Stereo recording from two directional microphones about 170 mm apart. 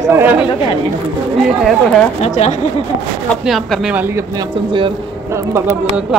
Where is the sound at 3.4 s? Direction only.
Centre (ahead or behind).